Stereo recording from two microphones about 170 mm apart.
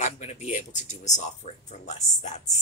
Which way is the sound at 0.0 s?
40° left (ahead or behind).